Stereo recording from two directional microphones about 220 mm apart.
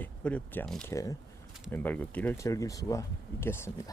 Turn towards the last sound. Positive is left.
turn(degrees=10)  # may be behind; listen again after turning